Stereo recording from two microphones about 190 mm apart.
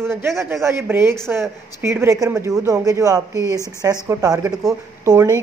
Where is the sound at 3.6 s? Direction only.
15° left (ahead or behind).